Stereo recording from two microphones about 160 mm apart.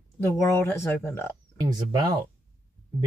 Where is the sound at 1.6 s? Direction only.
25° right (ahead or behind).